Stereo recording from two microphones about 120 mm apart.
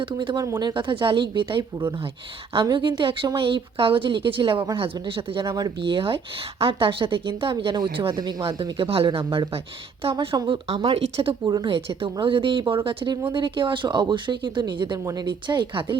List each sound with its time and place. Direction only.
0.0 s speech: 40° right (ahead or behind)
5.5 s speech: 35° right (ahead or behind)